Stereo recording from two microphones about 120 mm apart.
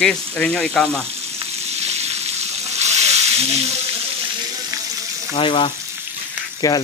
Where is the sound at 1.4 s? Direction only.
60° right (ahead or behind).